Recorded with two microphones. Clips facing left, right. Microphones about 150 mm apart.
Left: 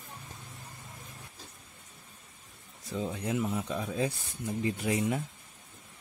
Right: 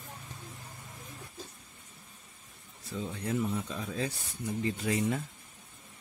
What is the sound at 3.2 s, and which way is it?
Speech, 15° left (ahead or behind).